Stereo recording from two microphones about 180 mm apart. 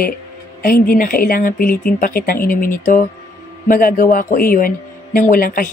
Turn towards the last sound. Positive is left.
turn(degrees=50)  # may be behind; listen again after turning